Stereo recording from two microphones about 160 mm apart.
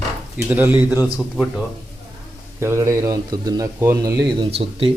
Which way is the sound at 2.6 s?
15° right (ahead or behind).